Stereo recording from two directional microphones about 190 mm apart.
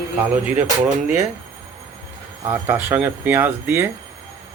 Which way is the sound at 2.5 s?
10° right (ahead or behind).